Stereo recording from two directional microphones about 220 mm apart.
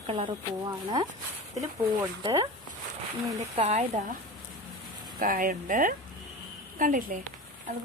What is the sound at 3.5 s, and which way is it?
Speech, 30° right (ahead or behind).